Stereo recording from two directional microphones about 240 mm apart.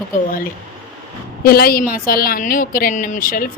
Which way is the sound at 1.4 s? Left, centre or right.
Left.